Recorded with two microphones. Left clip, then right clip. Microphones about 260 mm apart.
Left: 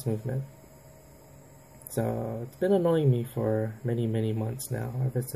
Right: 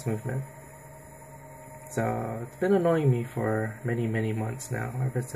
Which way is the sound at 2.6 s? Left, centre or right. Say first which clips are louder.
Even; right.